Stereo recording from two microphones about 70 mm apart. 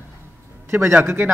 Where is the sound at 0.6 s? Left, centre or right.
Right.